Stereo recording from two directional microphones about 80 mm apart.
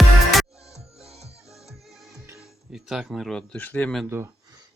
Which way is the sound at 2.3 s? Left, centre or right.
Centre.